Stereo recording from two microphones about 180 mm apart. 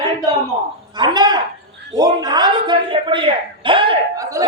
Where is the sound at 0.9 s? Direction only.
25° right (ahead or behind).